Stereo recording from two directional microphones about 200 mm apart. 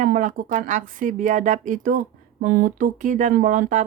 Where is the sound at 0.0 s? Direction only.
40° right (ahead or behind).